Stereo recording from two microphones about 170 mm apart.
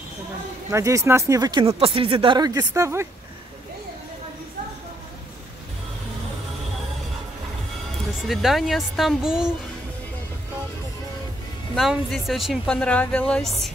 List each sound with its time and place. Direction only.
0.7 s speech: 15° right (ahead or behind)
8.3 s speech: centre (ahead or behind)
11.7 s speech: centre (ahead or behind)